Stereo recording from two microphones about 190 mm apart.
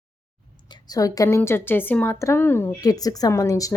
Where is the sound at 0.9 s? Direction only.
20° left (ahead or behind).